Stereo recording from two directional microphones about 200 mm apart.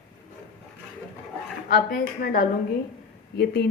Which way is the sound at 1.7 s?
45° left (ahead or behind).